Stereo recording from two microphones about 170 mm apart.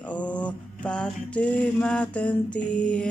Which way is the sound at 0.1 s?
10° left (ahead or behind).